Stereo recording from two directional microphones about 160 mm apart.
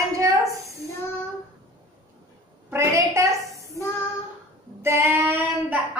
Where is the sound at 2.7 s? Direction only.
15° right (ahead or behind).